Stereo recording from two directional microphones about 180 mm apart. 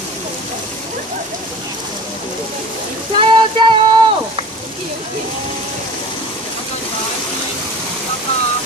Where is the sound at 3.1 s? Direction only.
25° right (ahead or behind).